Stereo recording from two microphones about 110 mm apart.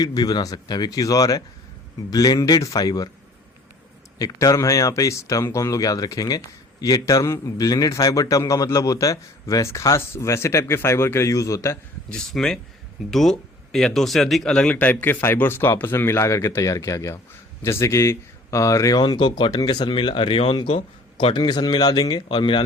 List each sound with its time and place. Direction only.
0.0 s speech: 40° left (ahead or behind)
4.2 s a man's voice: 30° left (ahead or behind)
12.0 s a man's voice: 5° left (ahead or behind); by 22.2 s 35° left (ahead or behind)
22.3 s speech: 50° left (ahead or behind)